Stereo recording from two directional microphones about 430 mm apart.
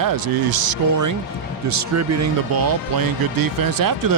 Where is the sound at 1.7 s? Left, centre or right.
Right.